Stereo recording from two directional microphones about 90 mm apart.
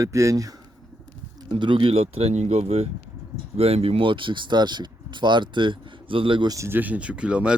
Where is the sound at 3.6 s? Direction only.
90° right; by 6.5 s 70° right (ahead or behind).